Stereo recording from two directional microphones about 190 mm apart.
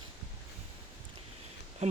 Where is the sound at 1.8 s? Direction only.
35° right (ahead or behind).